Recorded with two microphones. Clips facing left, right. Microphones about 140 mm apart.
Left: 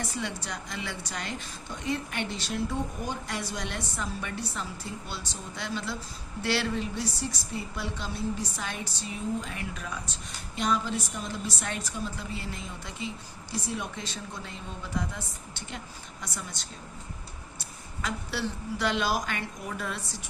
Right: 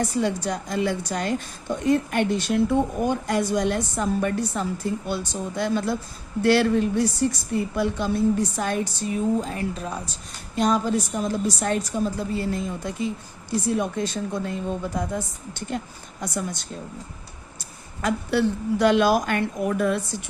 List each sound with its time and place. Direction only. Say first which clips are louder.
0.0 s speech: right 11 dB; 45° right (ahead or behind)
18.0 s speech: right 10 dB; 50° right (ahead or behind)